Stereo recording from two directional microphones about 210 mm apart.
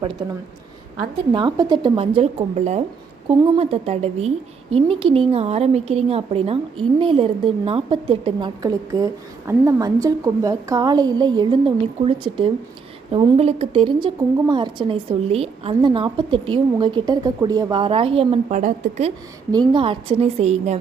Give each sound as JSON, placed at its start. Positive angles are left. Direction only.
{"t": 1.3, "sound": "a woman's voice", "side_deg": -20}
{"t": 19.5, "sound": "a woman's voice", "side_deg": -20}